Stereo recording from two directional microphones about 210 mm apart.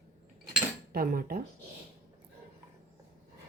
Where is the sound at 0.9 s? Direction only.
45° right (ahead or behind).